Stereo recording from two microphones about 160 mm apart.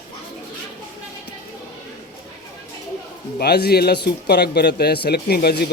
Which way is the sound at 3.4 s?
80° left.